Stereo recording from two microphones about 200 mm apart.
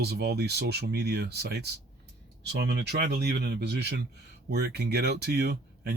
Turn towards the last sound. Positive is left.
turn(degrees=-55)  # may be behind; listen again after turning